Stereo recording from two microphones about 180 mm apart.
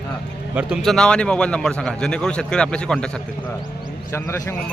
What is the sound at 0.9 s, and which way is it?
Speech, 5° left (ahead or behind).